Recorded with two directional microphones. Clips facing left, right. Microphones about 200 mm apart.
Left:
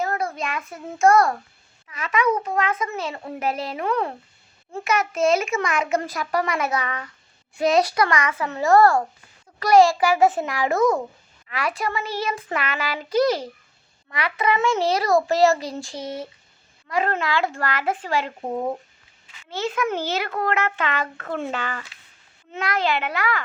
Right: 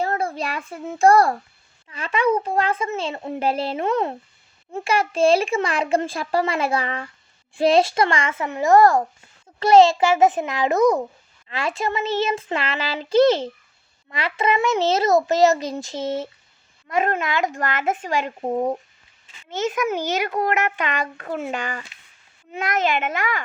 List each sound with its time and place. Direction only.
0.0 s a child's voice: 30° right (ahead or behind)